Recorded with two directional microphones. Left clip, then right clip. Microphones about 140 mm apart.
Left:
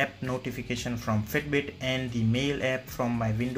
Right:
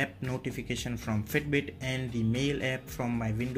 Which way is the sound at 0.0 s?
40° right (ahead or behind).